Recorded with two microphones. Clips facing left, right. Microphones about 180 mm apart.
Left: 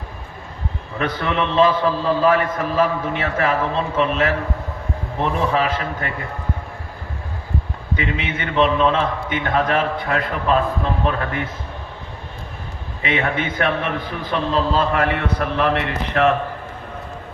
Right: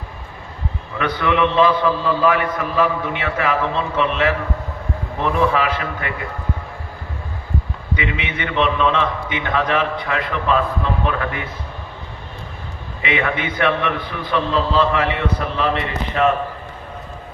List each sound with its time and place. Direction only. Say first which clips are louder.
0.9 s a man's voice: right 3 dB; 35° left (ahead or behind)
7.9 s a man's voice: even; 40° left (ahead or behind)
13.0 s a man's voice: even; 40° left (ahead or behind); by 16.3 s 60° left (ahead or behind)